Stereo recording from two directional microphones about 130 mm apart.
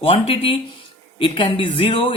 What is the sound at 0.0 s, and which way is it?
Speech, 45° left (ahead or behind).